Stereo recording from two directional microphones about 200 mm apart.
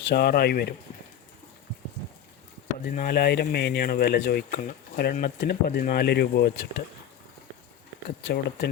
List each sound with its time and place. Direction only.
0.1 s speech: 50° left (ahead or behind)
2.8 s speech: 50° left (ahead or behind)
8.2 s speech: 55° left (ahead or behind)